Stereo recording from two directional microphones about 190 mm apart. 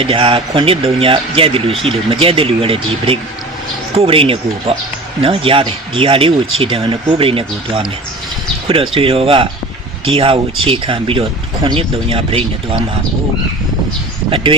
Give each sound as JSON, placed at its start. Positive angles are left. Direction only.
{"t": 0.0, "sound": "speech", "side_deg": -30}
{"t": 14.3, "sound": "speech", "side_deg": -30}